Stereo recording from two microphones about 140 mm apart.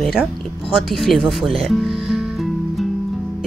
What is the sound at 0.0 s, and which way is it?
Speech, 5° right (ahead or behind).